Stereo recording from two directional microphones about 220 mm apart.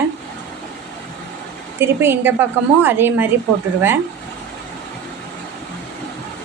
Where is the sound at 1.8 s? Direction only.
10° right (ahead or behind).